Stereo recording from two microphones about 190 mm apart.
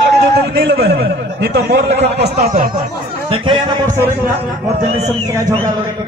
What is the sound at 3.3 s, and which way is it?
A man's voice, 25° right (ahead or behind).